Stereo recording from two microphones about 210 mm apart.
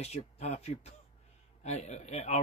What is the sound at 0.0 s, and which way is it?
Speech, 30° left (ahead or behind).